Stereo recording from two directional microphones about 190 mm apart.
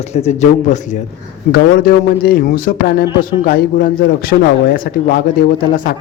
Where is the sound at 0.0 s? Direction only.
35° left (ahead or behind).